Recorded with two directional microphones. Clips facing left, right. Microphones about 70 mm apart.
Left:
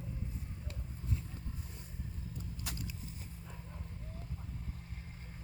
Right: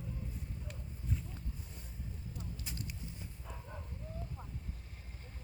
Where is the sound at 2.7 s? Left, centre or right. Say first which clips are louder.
Left 3 dB; left.